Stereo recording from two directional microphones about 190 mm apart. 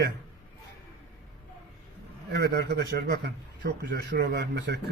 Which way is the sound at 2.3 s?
55° right (ahead or behind).